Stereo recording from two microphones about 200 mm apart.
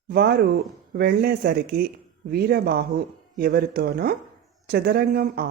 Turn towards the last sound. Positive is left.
turn(degrees=-50)  # may be behind; listen again after turning